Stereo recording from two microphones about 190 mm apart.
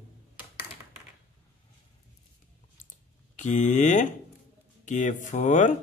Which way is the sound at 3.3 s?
40° left (ahead or behind).